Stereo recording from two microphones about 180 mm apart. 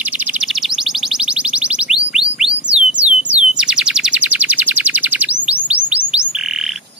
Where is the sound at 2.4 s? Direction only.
5° right (ahead or behind).